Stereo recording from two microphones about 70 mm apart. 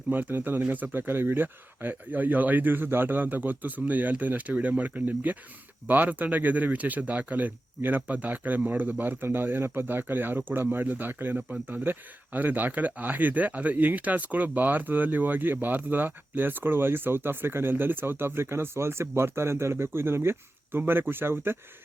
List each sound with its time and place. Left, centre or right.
0.1 s speech: right